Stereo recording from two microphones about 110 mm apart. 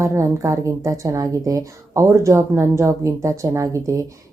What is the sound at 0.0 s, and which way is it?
Speech, 25° right (ahead or behind).